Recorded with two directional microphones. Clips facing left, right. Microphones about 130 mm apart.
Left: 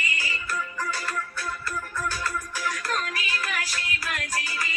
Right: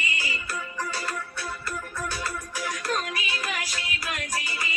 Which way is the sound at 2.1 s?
20° right (ahead or behind).